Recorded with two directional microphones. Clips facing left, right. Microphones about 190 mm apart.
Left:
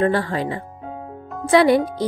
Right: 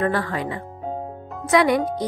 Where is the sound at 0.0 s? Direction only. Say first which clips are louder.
Left 3 dB; 30° left (ahead or behind).